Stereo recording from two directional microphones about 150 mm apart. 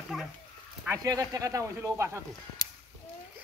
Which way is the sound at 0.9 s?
25° right (ahead or behind).